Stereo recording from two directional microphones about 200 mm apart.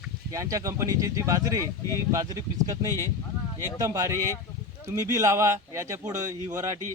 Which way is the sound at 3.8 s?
15° right (ahead or behind).